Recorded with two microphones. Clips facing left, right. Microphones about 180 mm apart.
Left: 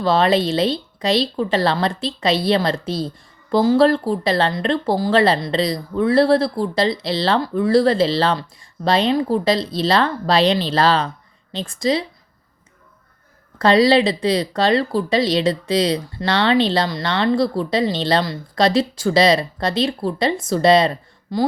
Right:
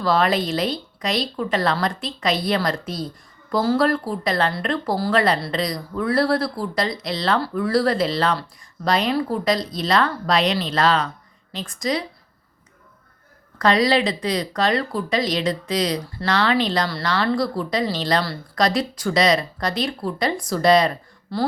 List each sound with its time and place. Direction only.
0.0 s speech: 25° left (ahead or behind)
13.6 s speech: 30° left (ahead or behind)
21.3 s speech: 15° left (ahead or behind)